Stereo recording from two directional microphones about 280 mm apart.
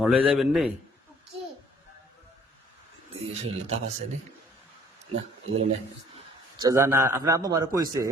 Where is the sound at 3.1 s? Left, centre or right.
Right.